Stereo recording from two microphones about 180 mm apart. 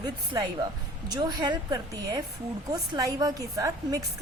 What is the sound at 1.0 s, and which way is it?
A woman's voice, 20° right (ahead or behind).